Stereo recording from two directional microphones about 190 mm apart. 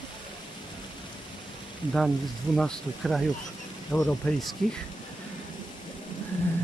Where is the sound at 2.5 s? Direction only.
5° left (ahead or behind).